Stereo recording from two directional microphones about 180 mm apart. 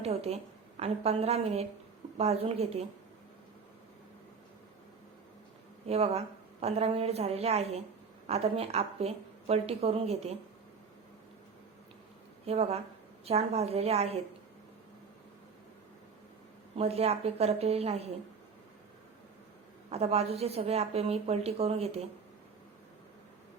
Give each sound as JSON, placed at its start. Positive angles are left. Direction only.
{"t": 0.0, "sound": "a woman's voice", "side_deg": -35}
{"t": 5.8, "sound": "a woman's voice", "side_deg": -35}
{"t": 12.5, "sound": "a woman's voice", "side_deg": -35}
{"t": 16.7, "sound": "a woman's voice", "side_deg": -35}
{"t": 19.9, "sound": "a woman's voice", "side_deg": -35}